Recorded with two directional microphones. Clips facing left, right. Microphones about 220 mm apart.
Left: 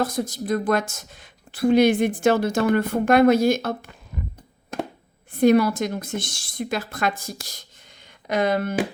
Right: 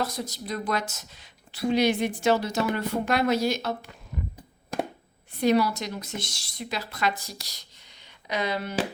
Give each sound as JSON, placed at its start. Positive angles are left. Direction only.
{"t": 0.0, "sound": "speech", "side_deg": 50}
{"t": 5.3, "sound": "speech", "side_deg": 50}